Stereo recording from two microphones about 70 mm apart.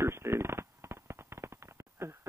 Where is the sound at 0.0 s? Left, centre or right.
Right.